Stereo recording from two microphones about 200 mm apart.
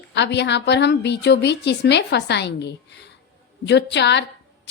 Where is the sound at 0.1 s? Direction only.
60° left (ahead or behind).